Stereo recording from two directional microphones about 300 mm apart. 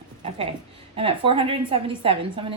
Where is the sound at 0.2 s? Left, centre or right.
Right.